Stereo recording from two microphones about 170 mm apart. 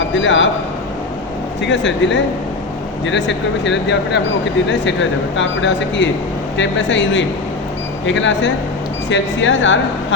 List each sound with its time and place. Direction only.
0.1 s speech: 90° left
1.6 s speech: 90° left